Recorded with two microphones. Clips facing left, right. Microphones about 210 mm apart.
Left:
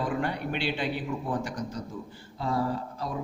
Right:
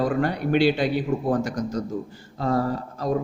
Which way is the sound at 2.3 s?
45° right (ahead or behind).